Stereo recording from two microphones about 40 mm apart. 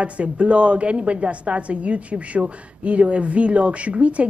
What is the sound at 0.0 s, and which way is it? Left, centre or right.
A woman's voice, right.